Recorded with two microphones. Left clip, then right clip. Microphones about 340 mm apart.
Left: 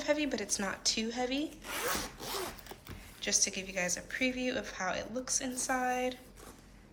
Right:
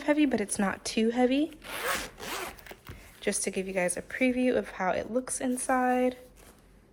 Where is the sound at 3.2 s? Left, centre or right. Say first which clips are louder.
Right 1 dB; centre.